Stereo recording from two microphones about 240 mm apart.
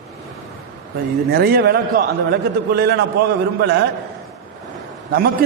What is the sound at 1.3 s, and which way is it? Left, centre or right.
A man's voice, right.